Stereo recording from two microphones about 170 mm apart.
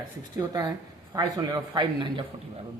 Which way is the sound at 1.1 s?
25° right (ahead or behind).